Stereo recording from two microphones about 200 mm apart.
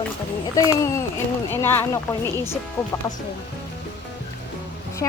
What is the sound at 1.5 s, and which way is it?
A woman's voice, 10° left (ahead or behind).